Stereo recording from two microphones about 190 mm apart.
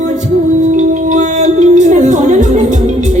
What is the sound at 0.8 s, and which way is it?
Music, 40° right (ahead or behind).